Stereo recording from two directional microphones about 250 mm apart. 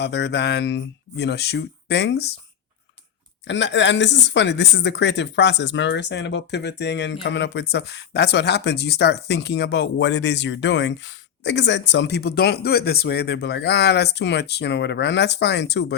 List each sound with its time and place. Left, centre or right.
0.0 s speech: left
3.4 s speech: left